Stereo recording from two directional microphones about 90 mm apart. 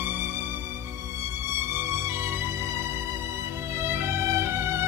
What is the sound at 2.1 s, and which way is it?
Music, 30° right (ahead or behind).